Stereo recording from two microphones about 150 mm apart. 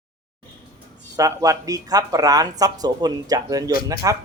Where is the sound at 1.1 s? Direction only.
25° right (ahead or behind).